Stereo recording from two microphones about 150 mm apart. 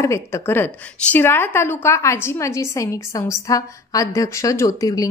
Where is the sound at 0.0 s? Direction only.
20° left (ahead or behind).